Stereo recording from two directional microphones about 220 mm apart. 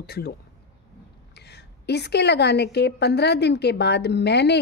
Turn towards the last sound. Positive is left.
turn(degrees=50)  # may be behind; listen again after turning